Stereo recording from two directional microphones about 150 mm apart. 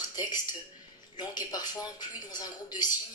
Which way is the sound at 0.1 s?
25° left (ahead or behind).